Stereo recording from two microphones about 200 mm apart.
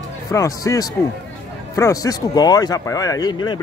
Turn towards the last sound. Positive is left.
turn(degrees=20)  # may be behind; listen again after turning